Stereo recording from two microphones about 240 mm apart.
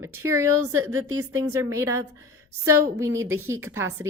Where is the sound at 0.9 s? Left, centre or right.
Right.